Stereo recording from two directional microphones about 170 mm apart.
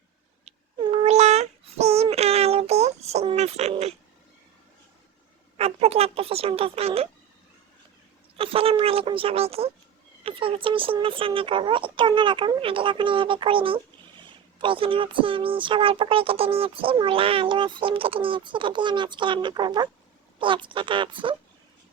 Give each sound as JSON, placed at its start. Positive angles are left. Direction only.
{"t": 0.4, "sound": "child singing", "side_deg": -30}
{"t": 5.5, "sound": "a sound", "side_deg": -35}
{"t": 8.4, "sound": "speech", "side_deg": -35}